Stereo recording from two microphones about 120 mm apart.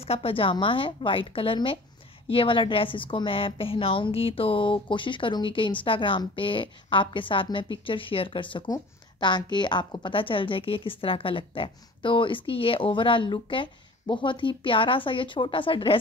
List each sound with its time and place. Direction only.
0.0 s a woman's voice: 55° left (ahead or behind)